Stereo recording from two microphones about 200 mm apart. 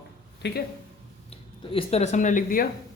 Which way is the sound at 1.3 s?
30° left (ahead or behind).